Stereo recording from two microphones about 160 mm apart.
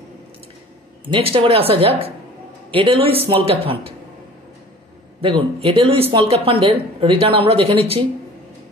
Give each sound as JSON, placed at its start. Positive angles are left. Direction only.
{"t": 1.0, "sound": "speech", "side_deg": -35}
{"t": 5.2, "sound": "speech", "side_deg": -35}